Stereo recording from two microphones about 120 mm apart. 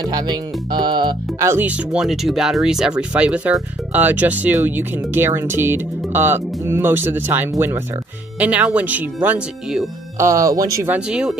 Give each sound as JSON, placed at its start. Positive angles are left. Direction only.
{"t": 0.0, "sound": "speech", "side_deg": -35}
{"t": 1.4, "sound": "speech", "side_deg": -20}
{"t": 1.7, "sound": "speech", "side_deg": -5}
{"t": 10.1, "sound": "speech", "side_deg": -25}
{"t": 10.9, "sound": "speech", "side_deg": -10}